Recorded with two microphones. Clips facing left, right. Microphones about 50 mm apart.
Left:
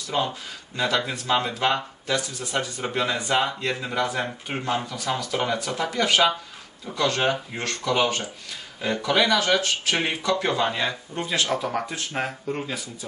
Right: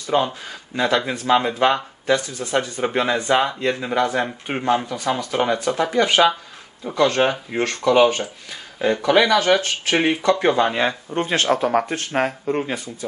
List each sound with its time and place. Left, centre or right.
0.0 s speech: right
9.6 s speech: right